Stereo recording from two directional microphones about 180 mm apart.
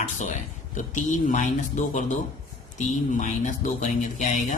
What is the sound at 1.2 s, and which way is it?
Speech, 45° left (ahead or behind).